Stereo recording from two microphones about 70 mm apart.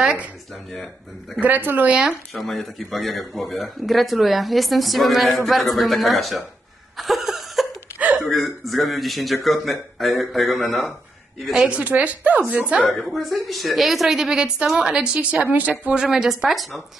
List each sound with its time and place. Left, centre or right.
0.0 s speech: centre
1.4 s speech: right
2.3 s speech: centre
7.0 s a sound: centre
8.6 s a woman's voice: centre
11.8 s speech: right
12.9 s a woman's voice: centre